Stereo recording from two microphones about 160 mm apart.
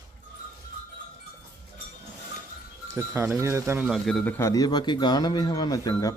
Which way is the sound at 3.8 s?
Centre (ahead or behind).